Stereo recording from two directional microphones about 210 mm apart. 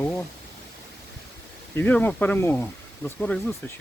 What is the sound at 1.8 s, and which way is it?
Speech, 10° left (ahead or behind).